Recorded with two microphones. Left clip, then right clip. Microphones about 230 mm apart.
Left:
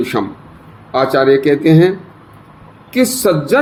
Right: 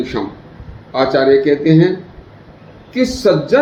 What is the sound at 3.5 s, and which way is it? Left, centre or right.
Speech, left.